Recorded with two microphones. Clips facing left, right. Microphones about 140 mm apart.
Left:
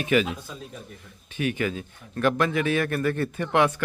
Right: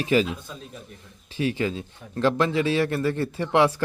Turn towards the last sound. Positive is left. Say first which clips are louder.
# right 2 dB
turn(degrees=-30)  # may be behind; listen again after turning